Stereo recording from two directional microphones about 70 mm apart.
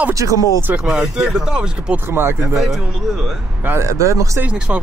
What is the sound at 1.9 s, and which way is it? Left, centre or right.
Speech, right.